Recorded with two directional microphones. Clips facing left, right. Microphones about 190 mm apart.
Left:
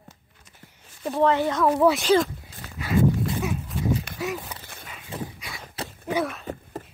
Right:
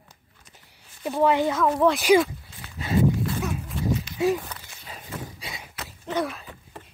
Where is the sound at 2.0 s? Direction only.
10° right (ahead or behind).